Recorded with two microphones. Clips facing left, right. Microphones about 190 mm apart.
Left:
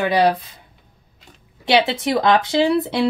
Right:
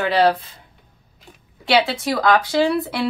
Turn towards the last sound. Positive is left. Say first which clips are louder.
# left 2 dB
turn(degrees=25)  # may be behind; listen again after turning